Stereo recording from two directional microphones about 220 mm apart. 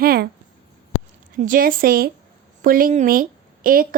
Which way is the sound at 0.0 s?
45° right (ahead or behind).